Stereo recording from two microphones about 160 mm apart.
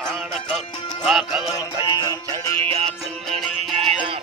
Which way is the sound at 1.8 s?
25° left (ahead or behind).